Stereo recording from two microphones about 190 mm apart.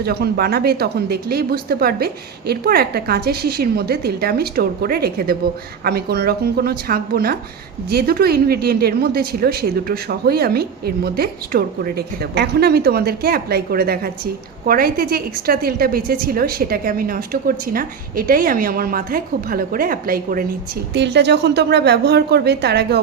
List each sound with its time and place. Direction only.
0.0 s a woman's voice: 55° right (ahead or behind)
20.9 s speech: 65° right (ahead or behind)